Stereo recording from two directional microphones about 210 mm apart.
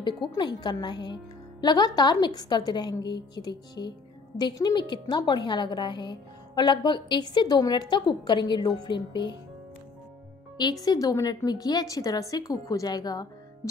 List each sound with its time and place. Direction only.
0.0 s a woman's voice: 20° left (ahead or behind)
10.6 s a woman's voice: 20° left (ahead or behind)